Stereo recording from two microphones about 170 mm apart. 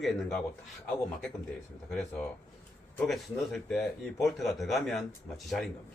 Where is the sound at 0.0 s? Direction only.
Centre (ahead or behind).